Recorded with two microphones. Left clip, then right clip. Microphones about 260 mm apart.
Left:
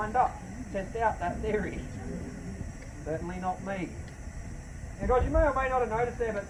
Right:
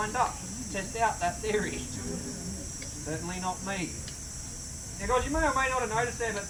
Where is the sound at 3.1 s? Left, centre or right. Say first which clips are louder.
Left 2 dB; right.